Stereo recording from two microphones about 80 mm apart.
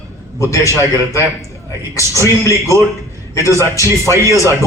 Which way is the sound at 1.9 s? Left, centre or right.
Left.